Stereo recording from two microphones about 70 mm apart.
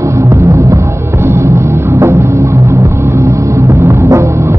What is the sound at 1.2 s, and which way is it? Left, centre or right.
Music, right.